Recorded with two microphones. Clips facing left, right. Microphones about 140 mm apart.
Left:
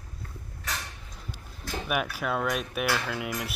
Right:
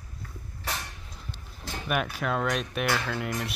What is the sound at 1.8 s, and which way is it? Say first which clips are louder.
Speech: right 1 dB; 5° left (ahead or behind).